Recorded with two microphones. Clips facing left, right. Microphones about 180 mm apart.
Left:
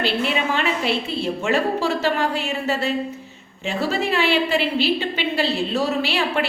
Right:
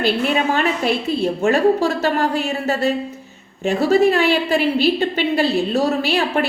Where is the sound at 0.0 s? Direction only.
45° right (ahead or behind).